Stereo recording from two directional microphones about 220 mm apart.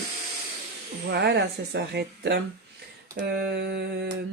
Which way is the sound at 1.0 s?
50° right (ahead or behind).